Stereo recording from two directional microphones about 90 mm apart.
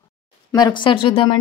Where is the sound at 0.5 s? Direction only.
55° left (ahead or behind); by 1.3 s 75° left (ahead or behind).